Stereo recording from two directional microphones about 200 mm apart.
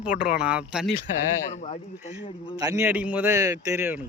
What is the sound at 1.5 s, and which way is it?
Speech, 35° left (ahead or behind).